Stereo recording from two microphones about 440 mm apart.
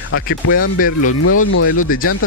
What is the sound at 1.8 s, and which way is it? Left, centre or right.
Speech, centre.